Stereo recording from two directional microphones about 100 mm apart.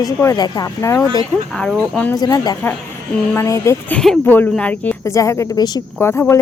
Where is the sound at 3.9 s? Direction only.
5° left (ahead or behind).